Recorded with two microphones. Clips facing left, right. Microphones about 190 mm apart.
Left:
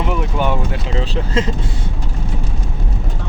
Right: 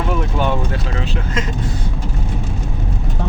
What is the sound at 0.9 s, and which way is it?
Vehicle, 30° left (ahead or behind).